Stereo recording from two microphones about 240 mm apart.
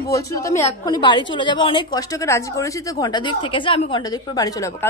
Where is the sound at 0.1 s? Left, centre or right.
Centre.